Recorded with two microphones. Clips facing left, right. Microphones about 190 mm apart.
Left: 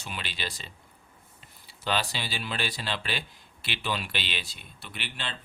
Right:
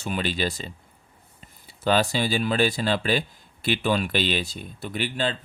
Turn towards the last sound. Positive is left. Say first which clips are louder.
# right 12 dB
turn(degrees=-40)  # may be behind; listen again after turning